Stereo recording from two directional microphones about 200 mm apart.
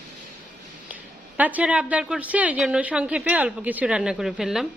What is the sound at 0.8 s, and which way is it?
A woman's voice, 5° right (ahead or behind).